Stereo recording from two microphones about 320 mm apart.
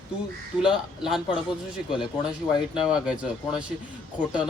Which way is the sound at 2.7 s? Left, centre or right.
Centre.